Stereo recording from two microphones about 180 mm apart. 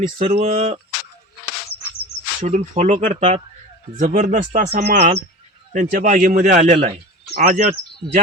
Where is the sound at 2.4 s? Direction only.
40° right (ahead or behind).